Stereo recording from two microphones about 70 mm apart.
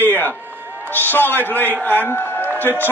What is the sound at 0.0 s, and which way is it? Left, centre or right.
Run, left.